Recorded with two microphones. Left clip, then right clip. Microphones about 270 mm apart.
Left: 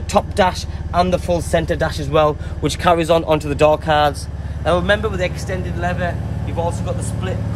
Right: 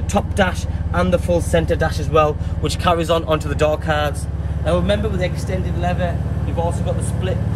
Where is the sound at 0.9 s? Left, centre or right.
Left.